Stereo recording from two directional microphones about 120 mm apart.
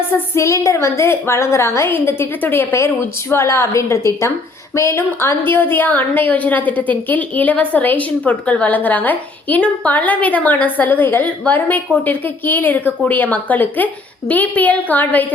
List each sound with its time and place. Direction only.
0.1 s a woman's voice: 25° left (ahead or behind)